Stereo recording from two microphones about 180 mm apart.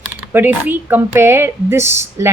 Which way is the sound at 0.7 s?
10° right (ahead or behind).